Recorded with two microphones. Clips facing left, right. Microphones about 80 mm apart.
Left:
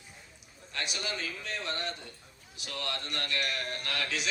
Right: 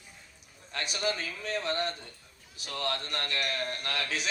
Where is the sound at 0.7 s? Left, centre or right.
Right.